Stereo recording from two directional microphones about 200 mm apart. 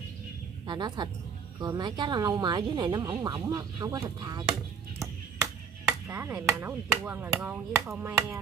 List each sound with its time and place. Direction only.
0.7 s speech: 20° right (ahead or behind)
6.0 s chop: 15° right (ahead or behind)